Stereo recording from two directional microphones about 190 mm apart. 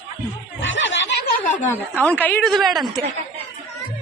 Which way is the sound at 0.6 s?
80° left.